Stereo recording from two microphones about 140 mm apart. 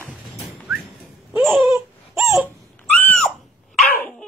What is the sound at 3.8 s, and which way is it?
Dog, 10° left (ahead or behind).